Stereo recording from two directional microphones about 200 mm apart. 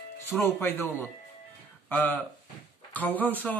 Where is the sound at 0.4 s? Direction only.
10° left (ahead or behind).